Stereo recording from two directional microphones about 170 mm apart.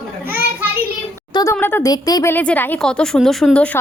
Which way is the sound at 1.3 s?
15° left (ahead or behind).